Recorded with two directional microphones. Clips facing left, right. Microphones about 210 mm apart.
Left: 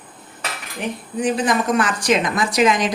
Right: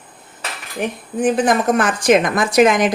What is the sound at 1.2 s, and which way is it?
Speech, 50° right (ahead or behind).